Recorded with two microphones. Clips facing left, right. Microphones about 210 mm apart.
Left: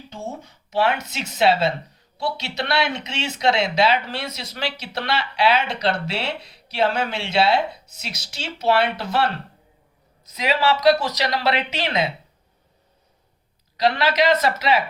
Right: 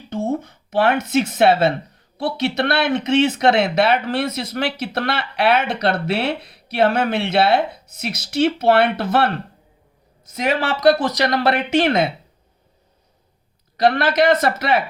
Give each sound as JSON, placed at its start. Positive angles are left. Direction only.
{"t": 0.1, "sound": "speech", "side_deg": -55}
{"t": 13.7, "sound": "speech", "side_deg": -50}